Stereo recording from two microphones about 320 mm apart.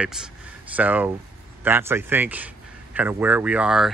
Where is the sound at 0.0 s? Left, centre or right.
Centre.